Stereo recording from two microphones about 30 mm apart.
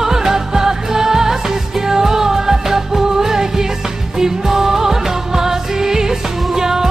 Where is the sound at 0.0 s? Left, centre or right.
Centre.